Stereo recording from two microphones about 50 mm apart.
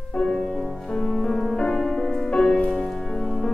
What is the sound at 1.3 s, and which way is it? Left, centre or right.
Music, centre.